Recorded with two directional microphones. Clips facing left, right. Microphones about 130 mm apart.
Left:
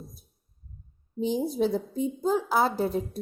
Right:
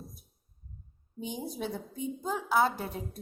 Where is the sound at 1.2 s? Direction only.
30° left (ahead or behind).